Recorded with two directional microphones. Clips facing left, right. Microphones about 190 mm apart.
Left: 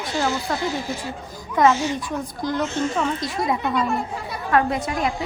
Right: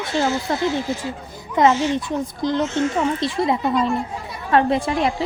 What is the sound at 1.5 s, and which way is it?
A woman's voice, 25° right (ahead or behind).